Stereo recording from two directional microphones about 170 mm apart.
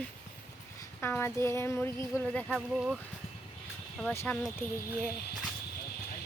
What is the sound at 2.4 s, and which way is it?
Speech, 5° right (ahead or behind).